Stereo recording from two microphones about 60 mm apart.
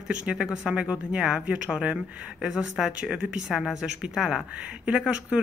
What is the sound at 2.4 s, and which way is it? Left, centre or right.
Speech, centre.